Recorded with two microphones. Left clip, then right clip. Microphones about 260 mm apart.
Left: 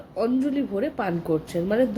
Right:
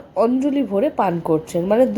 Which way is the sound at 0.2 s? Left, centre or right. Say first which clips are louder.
Right 6 dB; centre.